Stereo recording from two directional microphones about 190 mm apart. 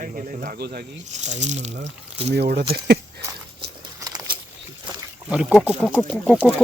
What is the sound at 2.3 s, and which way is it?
Speech, 60° right (ahead or behind).